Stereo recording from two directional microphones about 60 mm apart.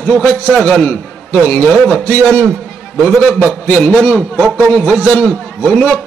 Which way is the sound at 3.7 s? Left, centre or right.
Left.